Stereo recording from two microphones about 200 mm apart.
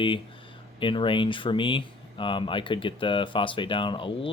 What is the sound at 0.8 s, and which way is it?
Speech, 25° left (ahead or behind).